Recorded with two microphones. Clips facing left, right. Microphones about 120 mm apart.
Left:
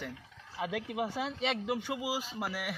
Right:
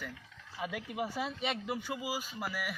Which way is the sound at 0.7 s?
80° left.